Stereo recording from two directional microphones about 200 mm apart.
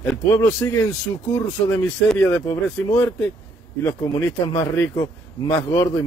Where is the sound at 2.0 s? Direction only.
5° left (ahead or behind).